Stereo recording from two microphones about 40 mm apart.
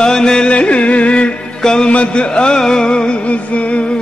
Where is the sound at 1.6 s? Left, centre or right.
Centre.